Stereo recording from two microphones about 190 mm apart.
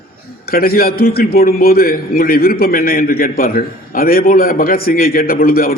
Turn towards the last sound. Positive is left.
turn(degrees=50)  # may be behind; listen again after turning